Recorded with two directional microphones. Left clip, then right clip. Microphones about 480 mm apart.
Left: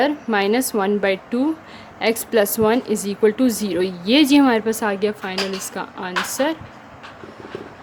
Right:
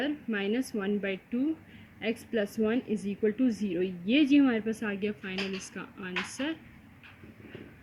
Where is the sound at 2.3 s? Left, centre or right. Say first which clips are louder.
Left 13 dB; left.